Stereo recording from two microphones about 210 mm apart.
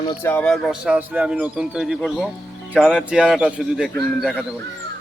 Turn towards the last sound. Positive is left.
turn(degrees=0)  # may be behind; listen again after turning